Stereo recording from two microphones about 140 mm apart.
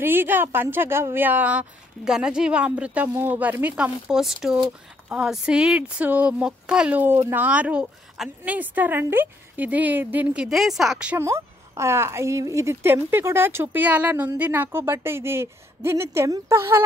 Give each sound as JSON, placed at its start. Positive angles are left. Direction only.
{"t": 0.0, "sound": "a woman's voice", "side_deg": -15}
{"t": 11.1, "sound": "a woman's voice", "side_deg": -20}